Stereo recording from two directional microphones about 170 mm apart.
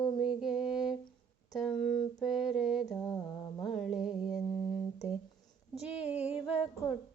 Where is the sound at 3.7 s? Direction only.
Centre (ahead or behind).